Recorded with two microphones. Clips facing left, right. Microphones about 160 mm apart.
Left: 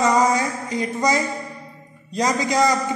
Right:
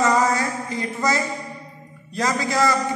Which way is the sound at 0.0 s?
15° left (ahead or behind).